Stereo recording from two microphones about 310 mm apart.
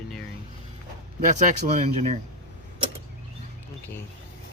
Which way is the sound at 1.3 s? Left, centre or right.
Right.